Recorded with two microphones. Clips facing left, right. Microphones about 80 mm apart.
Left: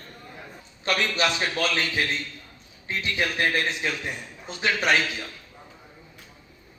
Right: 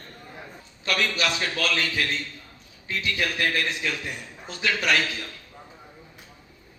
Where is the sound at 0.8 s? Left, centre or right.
Left.